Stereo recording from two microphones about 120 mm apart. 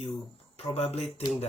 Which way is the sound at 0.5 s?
55° left (ahead or behind).